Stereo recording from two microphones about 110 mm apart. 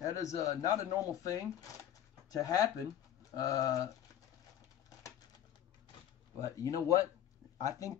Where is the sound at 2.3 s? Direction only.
35° left (ahead or behind).